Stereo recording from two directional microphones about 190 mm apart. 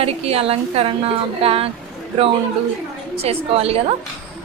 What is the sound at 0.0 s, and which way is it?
A woman's voice, 30° right (ahead or behind).